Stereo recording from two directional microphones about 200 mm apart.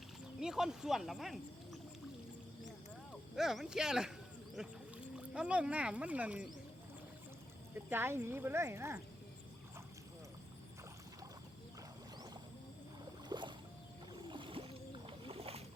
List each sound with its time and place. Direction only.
0.3 s speech: 5° right (ahead or behind)
3.1 s speech: centre (ahead or behind)
7.9 s speech: 10° right (ahead or behind)
13.2 s boat: 25° right (ahead or behind)